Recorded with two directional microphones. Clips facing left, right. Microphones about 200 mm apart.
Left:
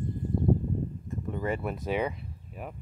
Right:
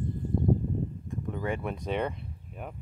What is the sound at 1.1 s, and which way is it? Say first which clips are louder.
Speech: left 2 dB; centre (ahead or behind).